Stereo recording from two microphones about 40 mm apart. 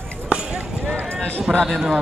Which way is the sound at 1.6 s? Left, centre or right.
Centre.